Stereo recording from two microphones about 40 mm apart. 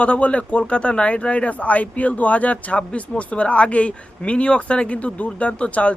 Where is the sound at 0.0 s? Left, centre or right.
Left.